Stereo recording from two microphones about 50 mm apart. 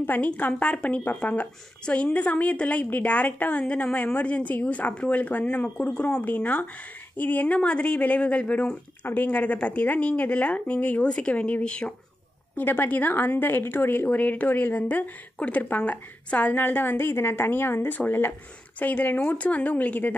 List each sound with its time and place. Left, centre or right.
0.0 s a woman's voice: left
9.0 s a woman's voice: left
12.5 s speech: left
14.1 s speech: left
16.5 s speech: left